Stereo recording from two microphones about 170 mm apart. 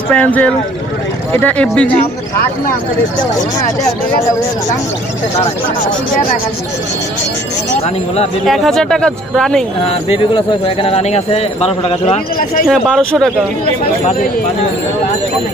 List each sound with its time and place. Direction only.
0.1 s speech: 10° left (ahead or behind)
8.5 s speech: centre (ahead or behind)
10.1 s a man's voice: 30° left (ahead or behind)
12.6 s speech: centre (ahead or behind)